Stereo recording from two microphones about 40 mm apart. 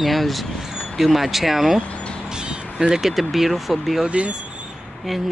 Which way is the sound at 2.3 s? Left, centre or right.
Centre.